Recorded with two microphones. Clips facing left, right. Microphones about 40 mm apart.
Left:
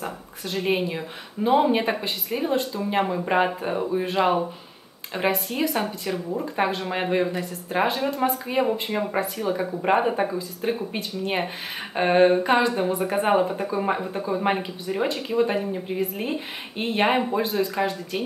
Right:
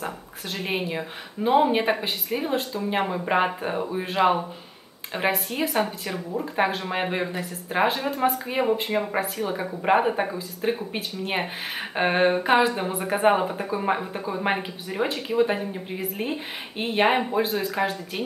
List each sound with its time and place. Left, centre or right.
0.0 s speech: centre